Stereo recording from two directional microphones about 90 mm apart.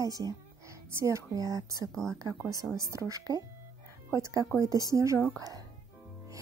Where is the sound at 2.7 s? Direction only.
35° right (ahead or behind).